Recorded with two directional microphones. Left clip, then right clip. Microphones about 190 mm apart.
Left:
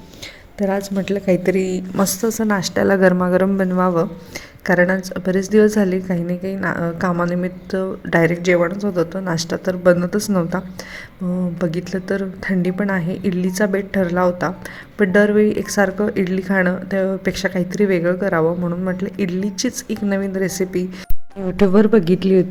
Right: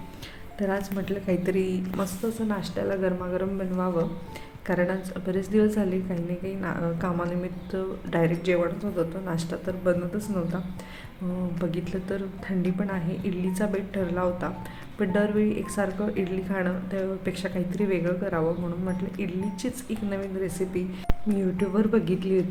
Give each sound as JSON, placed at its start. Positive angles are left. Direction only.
{"t": 0.6, "sound": "a woman's voice", "side_deg": 45}
{"t": 2.5, "sound": "speech", "side_deg": 60}
{"t": 4.6, "sound": "a woman's voice", "side_deg": 45}
{"t": 11.6, "sound": "a woman's voice", "side_deg": 40}